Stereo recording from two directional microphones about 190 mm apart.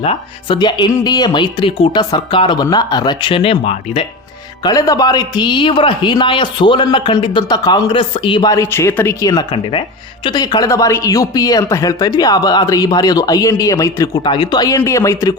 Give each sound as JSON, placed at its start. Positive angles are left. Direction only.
{"t": 0.0, "sound": "a man's voice", "side_deg": 30}
{"t": 4.6, "sound": "a man's voice", "side_deg": 20}